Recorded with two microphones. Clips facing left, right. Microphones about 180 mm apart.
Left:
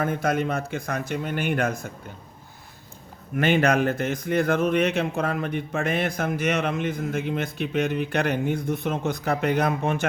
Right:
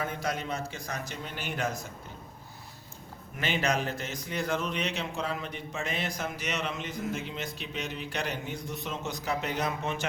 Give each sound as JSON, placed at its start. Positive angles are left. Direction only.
{"t": 0.0, "sound": "a man's voice", "side_deg": 55}
{"t": 3.3, "sound": "a man's voice", "side_deg": 55}